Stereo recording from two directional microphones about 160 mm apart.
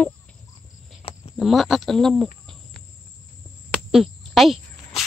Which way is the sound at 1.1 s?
35° left (ahead or behind).